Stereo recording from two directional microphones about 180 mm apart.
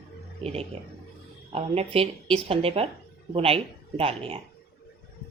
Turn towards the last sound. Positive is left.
turn(degrees=-30)  # may be behind; listen again after turning